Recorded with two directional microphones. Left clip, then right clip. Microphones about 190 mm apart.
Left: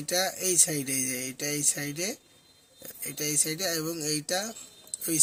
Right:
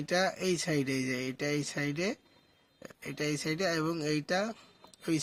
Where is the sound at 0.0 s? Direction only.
25° right (ahead or behind).